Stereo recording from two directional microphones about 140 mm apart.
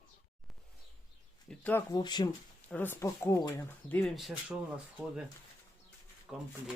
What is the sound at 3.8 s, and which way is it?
Speech, 5° left (ahead or behind).